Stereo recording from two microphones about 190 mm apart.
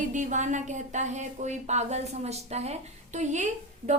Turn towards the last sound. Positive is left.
turn(degrees=-40)  # may be behind; listen again after turning